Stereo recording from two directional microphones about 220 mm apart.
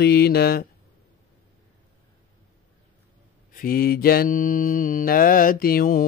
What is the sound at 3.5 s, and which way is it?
Mantra, 40° left (ahead or behind).